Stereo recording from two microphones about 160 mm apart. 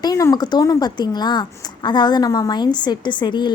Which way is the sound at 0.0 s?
20° left (ahead or behind).